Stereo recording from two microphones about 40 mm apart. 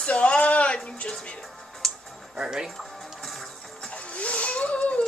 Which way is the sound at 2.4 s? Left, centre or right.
Centre.